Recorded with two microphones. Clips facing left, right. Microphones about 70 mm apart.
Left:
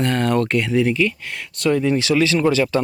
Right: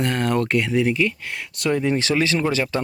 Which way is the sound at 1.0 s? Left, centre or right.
Right.